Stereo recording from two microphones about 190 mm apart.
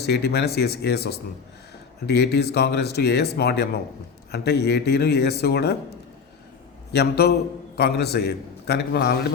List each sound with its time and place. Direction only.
0.0 s speech: 60° left (ahead or behind)
6.9 s speech: 60° left (ahead or behind)